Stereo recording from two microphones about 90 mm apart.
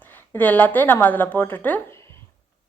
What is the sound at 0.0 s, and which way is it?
A woman's voice, 20° left (ahead or behind).